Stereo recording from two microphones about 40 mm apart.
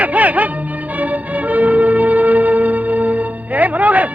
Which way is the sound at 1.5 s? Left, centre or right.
Right.